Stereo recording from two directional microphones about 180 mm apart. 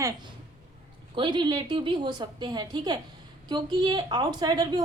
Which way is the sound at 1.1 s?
25° right (ahead or behind).